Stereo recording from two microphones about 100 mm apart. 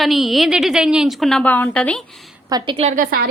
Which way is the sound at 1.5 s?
15° left (ahead or behind).